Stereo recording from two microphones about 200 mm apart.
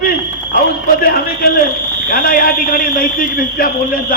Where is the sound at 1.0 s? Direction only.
45° left (ahead or behind).